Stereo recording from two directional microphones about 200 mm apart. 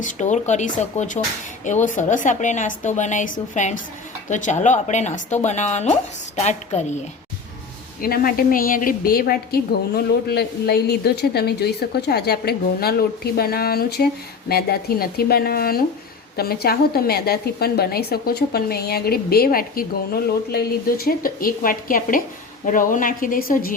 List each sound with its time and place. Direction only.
0.0 s a woman's voice: 35° left (ahead or behind)
8.0 s a woman's voice: 45° left (ahead or behind)